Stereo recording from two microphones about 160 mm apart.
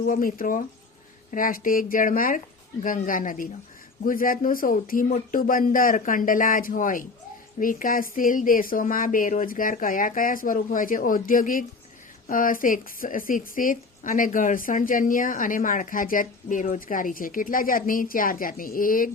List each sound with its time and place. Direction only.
0.1 s speech: 60° left (ahead or behind)